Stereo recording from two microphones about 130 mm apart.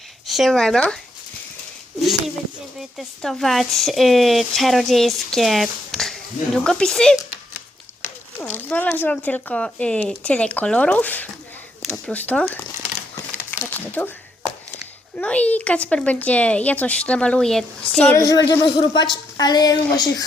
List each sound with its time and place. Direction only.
0.3 s speech: centre (ahead or behind)
2.0 s speech: centre (ahead or behind)
8.4 s speech: 10° left (ahead or behind)
13.5 s speech: 15° left (ahead or behind)
15.2 s speech: 10° left (ahead or behind)
18.1 s a woman's voice: 25° left (ahead or behind)